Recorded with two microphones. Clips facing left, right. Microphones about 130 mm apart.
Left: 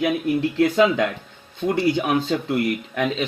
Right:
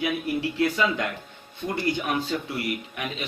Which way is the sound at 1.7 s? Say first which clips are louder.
Left 7 dB; 65° left (ahead or behind).